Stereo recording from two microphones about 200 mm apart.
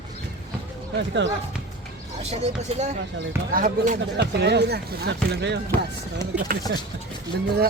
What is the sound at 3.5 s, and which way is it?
Speech, 45° right (ahead or behind).